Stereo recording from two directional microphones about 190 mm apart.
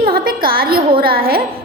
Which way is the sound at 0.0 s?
50° right (ahead or behind).